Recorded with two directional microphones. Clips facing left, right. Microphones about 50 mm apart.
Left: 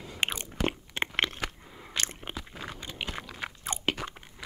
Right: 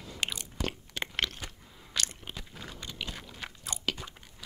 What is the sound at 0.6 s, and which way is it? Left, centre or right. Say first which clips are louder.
Biting: left 5 dB; left.